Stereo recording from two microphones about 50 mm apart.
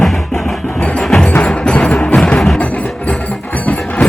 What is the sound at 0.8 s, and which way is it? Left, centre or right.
Music, left.